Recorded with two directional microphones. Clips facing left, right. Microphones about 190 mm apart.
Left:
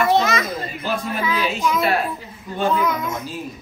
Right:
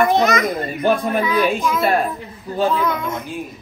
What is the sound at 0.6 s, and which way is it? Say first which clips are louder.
Speech: right 7 dB; 55° right (ahead or behind).